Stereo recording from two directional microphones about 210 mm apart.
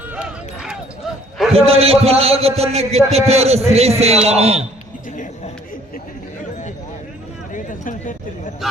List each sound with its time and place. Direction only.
0.1 s a sound: 5° right (ahead or behind)
1.5 s a man's voice: 30° right (ahead or behind)
7.5 s speech: 40° left (ahead or behind)